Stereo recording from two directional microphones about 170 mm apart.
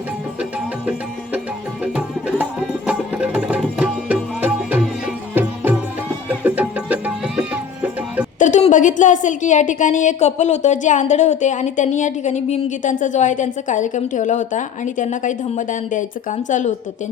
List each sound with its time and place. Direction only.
1.8 s music: 5° right (ahead or behind)
8.4 s a woman's voice: 45° left (ahead or behind)